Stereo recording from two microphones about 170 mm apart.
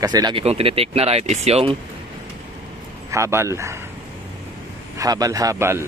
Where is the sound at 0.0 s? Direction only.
25° right (ahead or behind).